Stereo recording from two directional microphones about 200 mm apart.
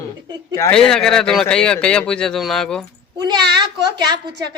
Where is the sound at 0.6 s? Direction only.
5° left (ahead or behind).